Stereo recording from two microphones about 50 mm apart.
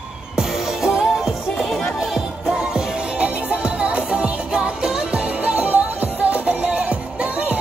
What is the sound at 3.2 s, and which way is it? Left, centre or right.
Music, right.